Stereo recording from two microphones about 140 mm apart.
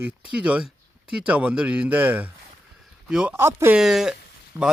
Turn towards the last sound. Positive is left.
turn(degrees=-5)  # may be behind; listen again after turning